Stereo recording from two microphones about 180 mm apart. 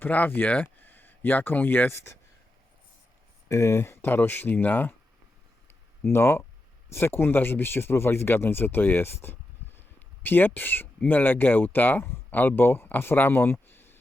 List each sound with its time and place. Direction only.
0.0 s speech: 10° left (ahead or behind)
3.5 s speech: 15° left (ahead or behind)
6.1 s speech: 15° left (ahead or behind)